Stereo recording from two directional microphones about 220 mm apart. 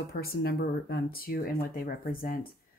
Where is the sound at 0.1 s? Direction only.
45° left (ahead or behind).